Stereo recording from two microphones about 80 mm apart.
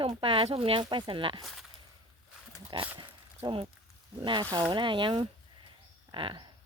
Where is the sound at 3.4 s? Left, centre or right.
Right.